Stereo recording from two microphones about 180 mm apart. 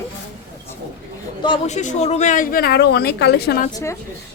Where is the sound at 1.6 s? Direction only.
40° left (ahead or behind); by 3.6 s 65° left (ahead or behind).